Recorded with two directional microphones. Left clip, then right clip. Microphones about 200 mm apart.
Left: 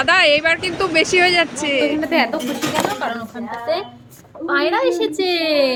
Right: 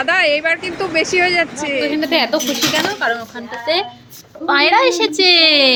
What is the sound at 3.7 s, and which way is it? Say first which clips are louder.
A woman's voice: right 5 dB; 25° right (ahead or behind).